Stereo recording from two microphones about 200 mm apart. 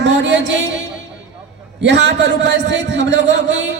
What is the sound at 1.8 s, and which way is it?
A man's voice, 60° right (ahead or behind).